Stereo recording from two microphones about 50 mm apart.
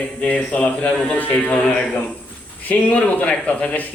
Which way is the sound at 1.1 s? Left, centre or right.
Left.